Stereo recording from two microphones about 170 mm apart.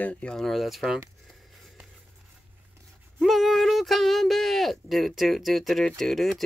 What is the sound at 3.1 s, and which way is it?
Speech, centre (ahead or behind).